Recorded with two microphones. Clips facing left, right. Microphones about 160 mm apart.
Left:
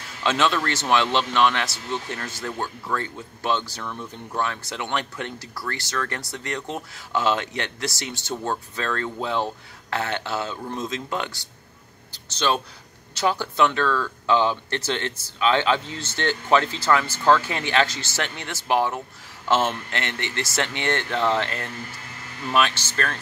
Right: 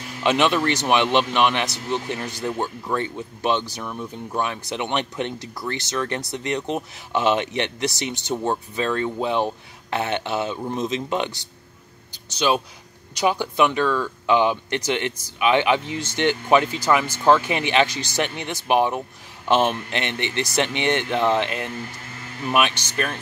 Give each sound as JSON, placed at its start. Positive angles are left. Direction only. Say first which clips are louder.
{"t": 0.2, "sound": "speech", "louder": "right 3 dB", "side_deg": -15}
{"t": 12.1, "sound": "a sound", "louder": "right 3 dB", "side_deg": -10}
{"t": 13.1, "sound": "speech", "louder": "right 2 dB", "side_deg": -15}